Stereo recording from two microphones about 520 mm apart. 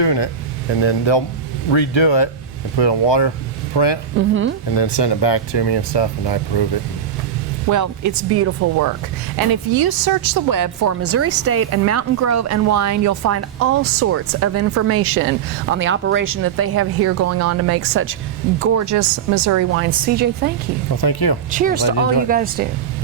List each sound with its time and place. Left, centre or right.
0.0 s speech: left
4.2 s speech: right
4.8 s speech: left
7.7 s speech: right
9.5 s speech: right
19.9 s a woman's voice: centre
20.9 s speech: left
21.5 s a woman's voice: centre